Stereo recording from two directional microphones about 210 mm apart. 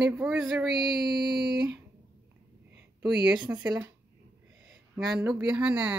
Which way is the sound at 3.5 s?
20° right (ahead or behind).